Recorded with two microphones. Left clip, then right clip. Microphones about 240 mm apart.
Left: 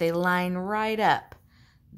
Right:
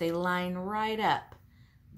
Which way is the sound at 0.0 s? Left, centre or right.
Left.